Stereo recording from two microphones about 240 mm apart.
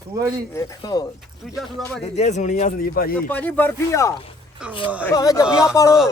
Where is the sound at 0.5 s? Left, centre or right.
Centre.